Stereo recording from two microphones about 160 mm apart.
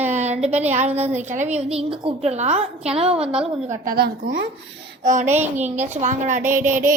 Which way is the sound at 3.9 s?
70° right (ahead or behind).